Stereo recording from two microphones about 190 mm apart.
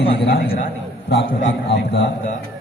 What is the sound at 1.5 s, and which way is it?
Speech, 65° left (ahead or behind).